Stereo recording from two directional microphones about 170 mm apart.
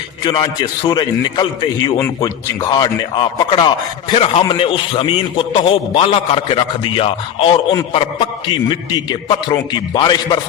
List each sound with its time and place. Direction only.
0.3 s a man's voice: 25° left (ahead or behind)